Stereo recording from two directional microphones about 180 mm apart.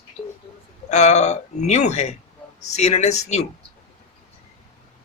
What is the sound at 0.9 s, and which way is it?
Speech, 40° left (ahead or behind).